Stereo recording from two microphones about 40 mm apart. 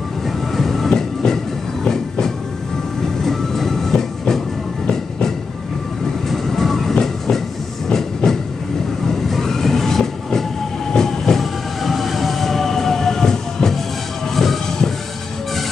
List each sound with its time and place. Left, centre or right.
0.5 s train: centre
6.2 s train: centre
14.3 s music: centre